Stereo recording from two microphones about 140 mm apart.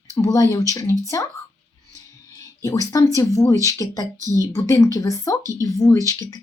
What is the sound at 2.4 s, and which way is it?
Speech, 25° left (ahead or behind).